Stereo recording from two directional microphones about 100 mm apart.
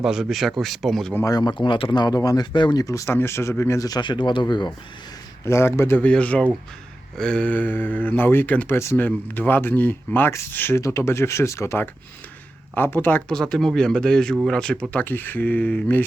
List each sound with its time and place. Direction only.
0.0 s speech: 5° right (ahead or behind)
1.2 s speech: 40° left (ahead or behind)
2.5 s speech: 50° left (ahead or behind)
2.8 s speech: 30° left (ahead or behind)
3.8 s speech: 40° left (ahead or behind)
5.5 s speech: 25° left (ahead or behind)
6.1 s speech: 10° left (ahead or behind)
9.0 s speech: 15° left (ahead or behind)
13.2 s speech: 5° left (ahead or behind)